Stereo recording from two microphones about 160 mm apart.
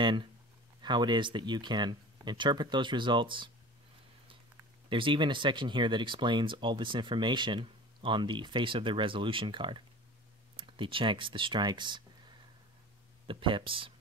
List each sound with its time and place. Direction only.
0.0 s speech: 30° right (ahead or behind)
4.8 s speech: 30° right (ahead or behind)
13.3 s speech: 30° right (ahead or behind)